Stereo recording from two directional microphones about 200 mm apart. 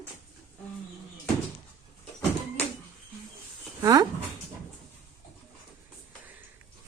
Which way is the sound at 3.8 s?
20° right (ahead or behind).